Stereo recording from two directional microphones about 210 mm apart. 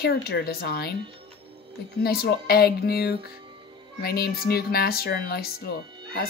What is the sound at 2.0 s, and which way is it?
Speech, 45° left (ahead or behind).